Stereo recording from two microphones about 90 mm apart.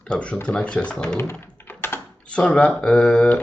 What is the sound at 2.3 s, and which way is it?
Speech, 10° left (ahead or behind).